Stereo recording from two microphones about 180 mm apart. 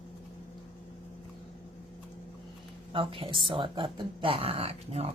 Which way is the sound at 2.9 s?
30° right (ahead or behind).